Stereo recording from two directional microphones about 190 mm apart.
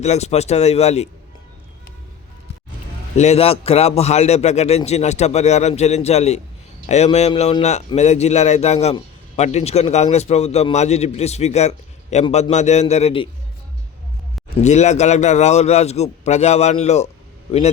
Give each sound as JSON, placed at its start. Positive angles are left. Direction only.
{"t": 0.0, "sound": "a man's voice", "side_deg": 35}
{"t": 3.2, "sound": "a man's voice", "side_deg": 35}
{"t": 14.6, "sound": "a man's voice", "side_deg": 40}